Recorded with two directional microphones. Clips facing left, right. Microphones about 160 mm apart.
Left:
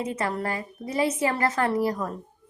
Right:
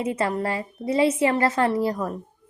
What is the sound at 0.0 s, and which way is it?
Speech, 25° right (ahead or behind).